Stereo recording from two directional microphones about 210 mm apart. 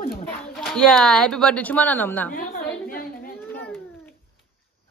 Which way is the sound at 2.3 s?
45° left (ahead or behind).